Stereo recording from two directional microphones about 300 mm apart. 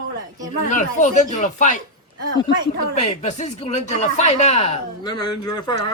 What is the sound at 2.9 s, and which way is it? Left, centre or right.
Speech, left.